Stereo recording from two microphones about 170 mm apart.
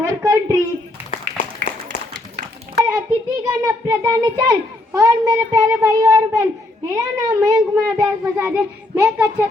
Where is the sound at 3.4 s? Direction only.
20° right (ahead or behind).